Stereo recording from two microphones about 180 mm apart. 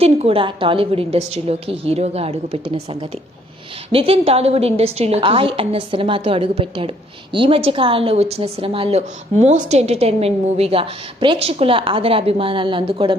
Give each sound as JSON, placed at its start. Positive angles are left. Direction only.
{"t": 0.0, "sound": "speech", "side_deg": -35}